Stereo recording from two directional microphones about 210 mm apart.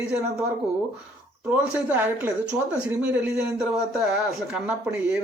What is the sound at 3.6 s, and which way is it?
Speech, centre (ahead or behind).